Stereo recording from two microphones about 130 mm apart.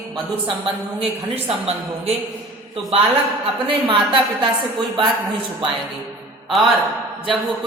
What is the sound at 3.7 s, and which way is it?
Speech, 40° right (ahead or behind).